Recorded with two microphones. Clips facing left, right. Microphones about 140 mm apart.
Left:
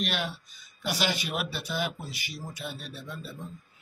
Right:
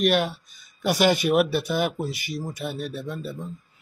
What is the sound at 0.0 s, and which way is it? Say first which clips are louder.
Speech: right 10 dB; 50° right (ahead or behind).